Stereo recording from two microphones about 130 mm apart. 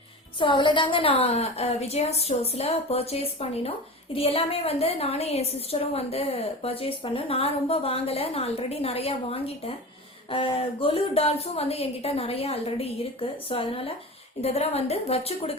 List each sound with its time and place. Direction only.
0.3 s a woman's voice: 40° left (ahead or behind)